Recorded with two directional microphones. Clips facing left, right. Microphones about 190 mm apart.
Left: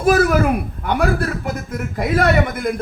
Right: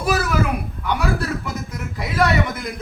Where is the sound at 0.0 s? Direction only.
50° left (ahead or behind).